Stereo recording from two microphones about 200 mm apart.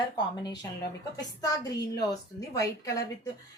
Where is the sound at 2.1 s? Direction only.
15° left (ahead or behind).